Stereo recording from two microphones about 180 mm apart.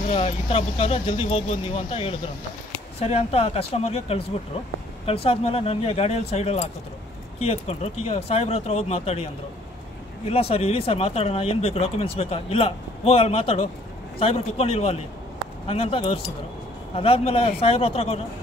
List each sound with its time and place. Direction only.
0.1 s speech: 35° left (ahead or behind)